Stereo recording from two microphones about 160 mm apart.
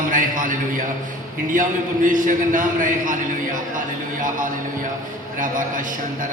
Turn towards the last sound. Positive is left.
turn(degrees=-55)  # may be behind; listen again after turning